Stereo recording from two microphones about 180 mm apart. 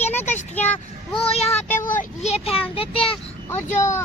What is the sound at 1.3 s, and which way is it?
Child singing, 35° left (ahead or behind).